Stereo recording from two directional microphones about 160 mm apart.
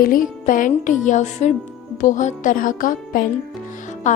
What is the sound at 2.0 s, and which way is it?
Music, 50° left (ahead or behind).